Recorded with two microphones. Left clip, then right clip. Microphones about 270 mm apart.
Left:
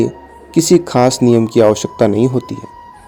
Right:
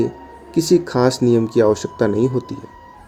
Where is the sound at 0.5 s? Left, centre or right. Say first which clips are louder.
Left 5 dB; left.